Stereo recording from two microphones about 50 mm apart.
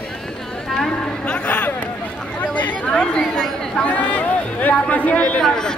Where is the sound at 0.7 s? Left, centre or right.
Centre.